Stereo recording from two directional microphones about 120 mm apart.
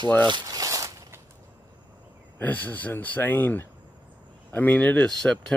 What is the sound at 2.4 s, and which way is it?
Speech, 15° left (ahead or behind).